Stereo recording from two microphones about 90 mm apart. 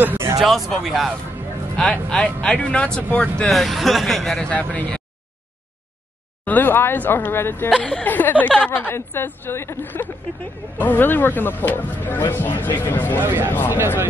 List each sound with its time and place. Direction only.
0.0 s a sound: 20° right (ahead or behind)
0.4 s speech: centre (ahead or behind)
1.8 s speech: 10° left (ahead or behind)
3.4 s speech: centre (ahead or behind)
4.5 s speech: 15° left (ahead or behind)
6.4 s speech: 20° left (ahead or behind)
13.2 s speech: 25° right (ahead or behind)